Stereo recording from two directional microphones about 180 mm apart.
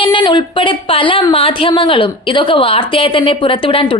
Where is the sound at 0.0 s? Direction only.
25° left (ahead or behind).